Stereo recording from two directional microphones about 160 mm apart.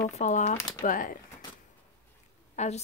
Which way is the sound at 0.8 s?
55° left (ahead or behind).